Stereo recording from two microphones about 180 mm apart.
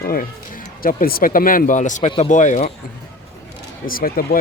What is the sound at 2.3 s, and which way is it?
Speech, 45° left (ahead or behind).